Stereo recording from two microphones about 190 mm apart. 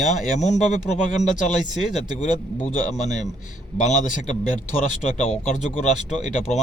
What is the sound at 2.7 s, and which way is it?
Speech, 40° left (ahead or behind).